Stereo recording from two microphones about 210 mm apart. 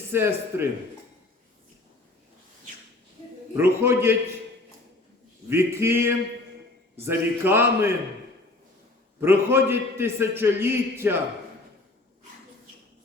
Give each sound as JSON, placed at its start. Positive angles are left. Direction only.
{"t": 0.1, "sound": "a man's voice", "side_deg": -10}
{"t": 3.5, "sound": "a man's voice", "side_deg": -10}
{"t": 5.5, "sound": "a man's voice", "side_deg": -10}
{"t": 9.2, "sound": "a man's voice", "side_deg": -10}